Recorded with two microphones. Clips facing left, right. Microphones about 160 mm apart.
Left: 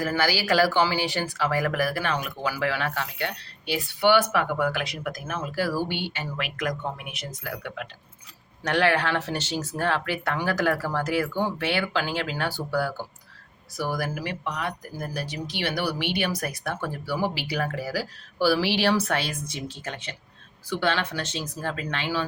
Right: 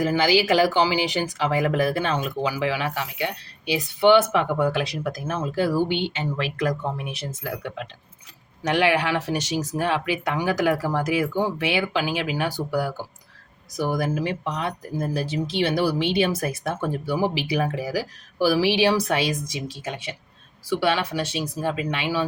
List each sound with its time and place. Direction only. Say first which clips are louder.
0.0 s speech: right 5 dB; 20° right (ahead or behind)
6.3 s speech: right 3 dB; 30° right (ahead or behind)
8.6 s speech: right 2 dB; 10° right (ahead or behind)